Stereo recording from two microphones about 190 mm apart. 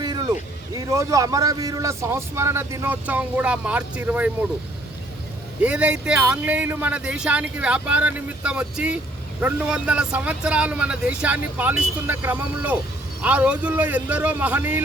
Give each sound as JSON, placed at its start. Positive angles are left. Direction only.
{"t": 0.0, "sound": "a sound", "side_deg": -20}
{"t": 0.7, "sound": "speech", "side_deg": -20}
{"t": 5.6, "sound": "speech", "side_deg": -5}